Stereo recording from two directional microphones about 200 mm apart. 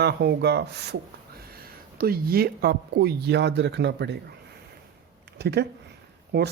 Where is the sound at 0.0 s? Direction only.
55° right (ahead or behind).